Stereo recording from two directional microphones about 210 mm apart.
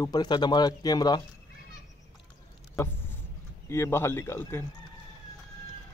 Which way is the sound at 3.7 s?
10° left (ahead or behind).